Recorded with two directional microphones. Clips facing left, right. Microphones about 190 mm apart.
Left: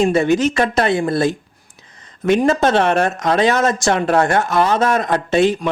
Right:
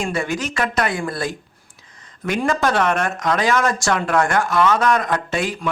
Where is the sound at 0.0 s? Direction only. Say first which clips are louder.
Left 9 dB; 25° left (ahead or behind).